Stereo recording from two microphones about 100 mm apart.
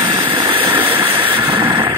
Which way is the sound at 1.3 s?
60° right (ahead or behind).